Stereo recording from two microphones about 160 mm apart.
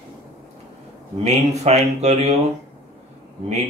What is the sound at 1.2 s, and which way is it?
Speech, 45° right (ahead or behind).